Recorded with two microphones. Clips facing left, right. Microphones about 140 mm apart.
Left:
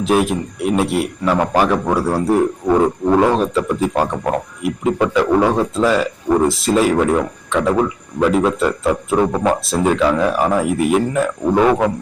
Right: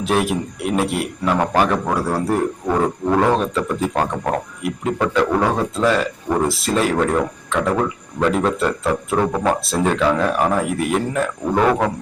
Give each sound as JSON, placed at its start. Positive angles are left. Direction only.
{"t": 0.0, "sound": "speech", "side_deg": 0}
{"t": 2.6, "sound": "wild animals", "side_deg": 15}
{"t": 3.2, "sound": "speech", "side_deg": 5}
{"t": 9.1, "sound": "wild animals", "side_deg": 10}
{"t": 9.6, "sound": "speech", "side_deg": 0}